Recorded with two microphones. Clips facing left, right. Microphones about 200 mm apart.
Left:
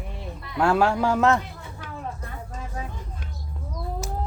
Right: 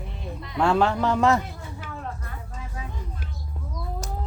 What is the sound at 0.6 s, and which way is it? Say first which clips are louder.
A man's voice: left 1 dB; 5° left (ahead or behind).